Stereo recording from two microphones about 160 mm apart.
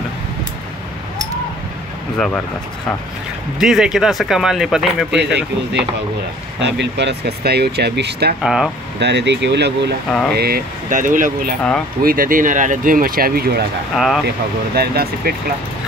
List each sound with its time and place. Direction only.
2.1 s speech: 5° left (ahead or behind)
3.5 s speech: centre (ahead or behind)
5.1 s speech: 90° right
8.4 s speech: 5° right (ahead or behind)
9.0 s speech: 90° right
10.3 s speech: 75° right (ahead or behind)
13.9 s speech: centre (ahead or behind)
14.8 s speech: 75° right (ahead or behind)